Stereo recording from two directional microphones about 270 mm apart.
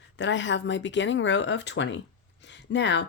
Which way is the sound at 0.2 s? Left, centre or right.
Left.